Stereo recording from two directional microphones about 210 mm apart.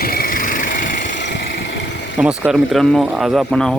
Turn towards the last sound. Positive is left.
turn(degrees=0)  # may be behind; listen again after turning